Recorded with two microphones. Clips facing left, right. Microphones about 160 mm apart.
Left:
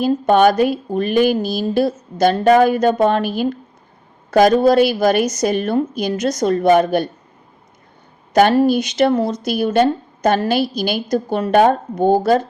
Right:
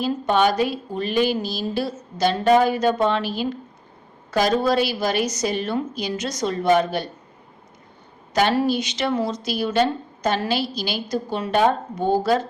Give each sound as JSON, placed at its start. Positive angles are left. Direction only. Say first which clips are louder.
{"t": 0.0, "sound": "speech", "louder": "left 7 dB", "side_deg": 50}
{"t": 8.3, "sound": "speech", "louder": "left 7 dB", "side_deg": 50}